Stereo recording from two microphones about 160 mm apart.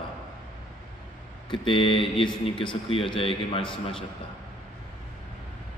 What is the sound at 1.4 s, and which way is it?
Speech, 30° left (ahead or behind).